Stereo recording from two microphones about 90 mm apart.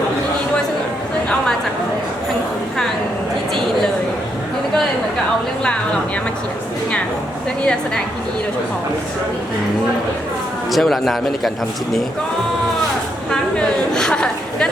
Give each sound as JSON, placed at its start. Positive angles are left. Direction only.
{"t": 7.6, "sound": "a woman's voice", "side_deg": 10}
{"t": 10.7, "sound": "a man's voice", "side_deg": 0}
{"t": 13.3, "sound": "chatter", "side_deg": 5}